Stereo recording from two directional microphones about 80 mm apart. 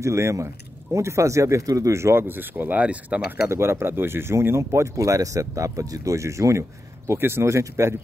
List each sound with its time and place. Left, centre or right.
0.0 s speech: right; by 3.3 s centre
3.4 s speech: right